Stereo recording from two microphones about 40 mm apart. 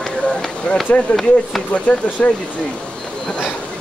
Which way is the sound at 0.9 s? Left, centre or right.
Left.